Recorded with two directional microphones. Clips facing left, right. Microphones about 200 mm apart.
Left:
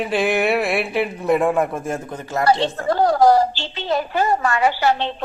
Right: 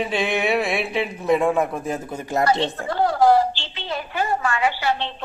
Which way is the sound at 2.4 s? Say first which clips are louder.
Left 5 dB; 40° left (ahead or behind).